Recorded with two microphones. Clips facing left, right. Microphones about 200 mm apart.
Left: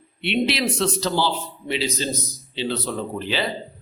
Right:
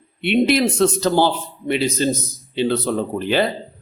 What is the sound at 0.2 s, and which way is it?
Speech, 50° right (ahead or behind).